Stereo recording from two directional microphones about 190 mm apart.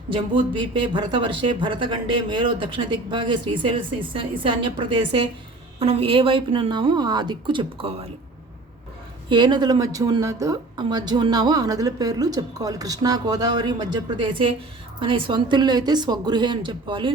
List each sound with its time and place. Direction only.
0.1 s speech: 25° right (ahead or behind)
9.3 s speech: 25° right (ahead or behind)